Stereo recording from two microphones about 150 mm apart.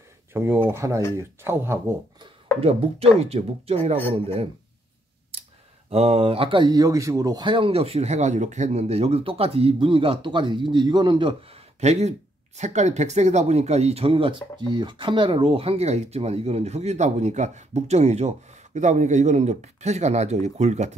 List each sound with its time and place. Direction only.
0.3 s speech: 15° right (ahead or behind)
2.6 s speech: 40° right (ahead or behind)
5.9 s speech: 45° right (ahead or behind)